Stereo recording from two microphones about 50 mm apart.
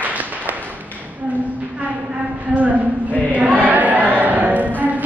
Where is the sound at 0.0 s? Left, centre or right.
Right.